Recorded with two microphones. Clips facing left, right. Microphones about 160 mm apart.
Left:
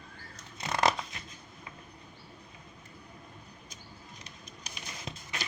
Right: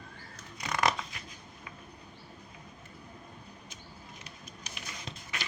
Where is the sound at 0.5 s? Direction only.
25° left (ahead or behind).